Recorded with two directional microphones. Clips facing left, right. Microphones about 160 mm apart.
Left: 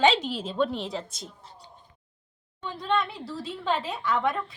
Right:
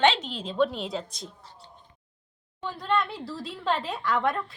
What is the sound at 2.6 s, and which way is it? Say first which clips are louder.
A woman's voice: even; centre (ahead or behind).